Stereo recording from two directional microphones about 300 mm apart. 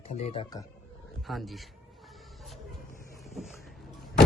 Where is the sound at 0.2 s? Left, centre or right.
Centre.